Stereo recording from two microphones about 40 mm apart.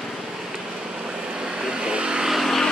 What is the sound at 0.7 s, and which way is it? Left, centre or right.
Vehicle, right.